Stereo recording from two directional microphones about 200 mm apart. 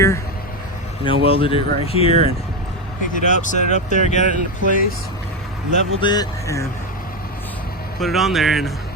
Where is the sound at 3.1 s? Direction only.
40° left (ahead or behind).